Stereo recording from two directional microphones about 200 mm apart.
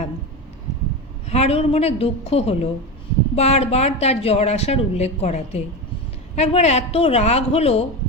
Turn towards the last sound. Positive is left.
turn(degrees=30)  # may be behind; listen again after turning